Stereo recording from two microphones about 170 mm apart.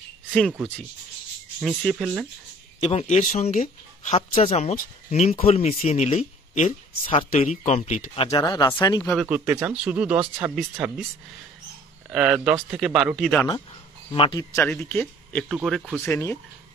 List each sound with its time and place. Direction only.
0.3 s speech: centre (ahead or behind)
2.8 s speech: 40° left (ahead or behind)
8.4 s speech: 25° left (ahead or behind)
9.1 s speech: 5° right (ahead or behind)
12.1 s speech: 5° right (ahead or behind)
14.1 s speech: 30° left (ahead or behind)
14.5 s speech: 10° left (ahead or behind)
16.0 s speech: 15° left (ahead or behind)